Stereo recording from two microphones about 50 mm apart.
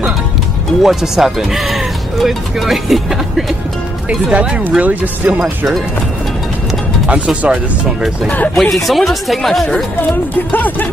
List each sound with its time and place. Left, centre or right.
0.8 s speech: centre
4.1 s speech: right
7.1 s speech: right
8.5 s speech: centre
9.9 s speech: left